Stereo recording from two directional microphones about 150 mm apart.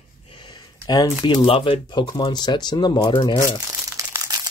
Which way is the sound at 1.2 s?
35° left (ahead or behind).